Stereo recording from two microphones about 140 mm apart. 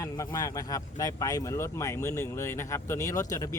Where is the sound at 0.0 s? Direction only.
25° left (ahead or behind).